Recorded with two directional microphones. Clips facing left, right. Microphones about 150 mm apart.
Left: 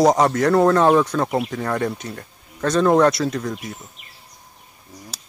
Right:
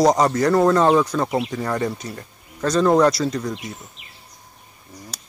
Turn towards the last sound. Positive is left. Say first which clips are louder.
# even
turn(degrees=0)  # may be behind; listen again after turning